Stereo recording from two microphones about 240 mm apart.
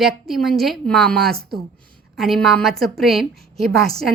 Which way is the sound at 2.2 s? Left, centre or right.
Centre.